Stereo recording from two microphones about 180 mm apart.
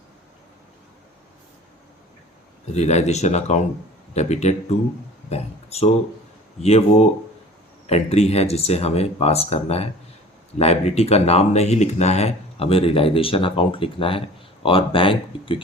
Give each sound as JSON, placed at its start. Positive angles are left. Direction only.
{"t": 2.7, "sound": "speech", "side_deg": 40}
{"t": 7.9, "sound": "speech", "side_deg": 35}